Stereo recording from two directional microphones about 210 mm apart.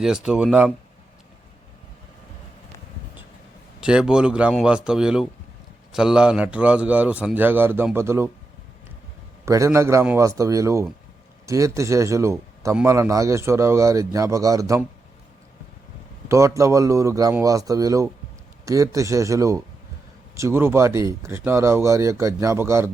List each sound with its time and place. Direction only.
0.0 s speech: 5° right (ahead or behind)
3.8 s a man's voice: 5° right (ahead or behind)
9.5 s a man's voice: 15° right (ahead or behind)
16.3 s a man's voice: 15° right (ahead or behind)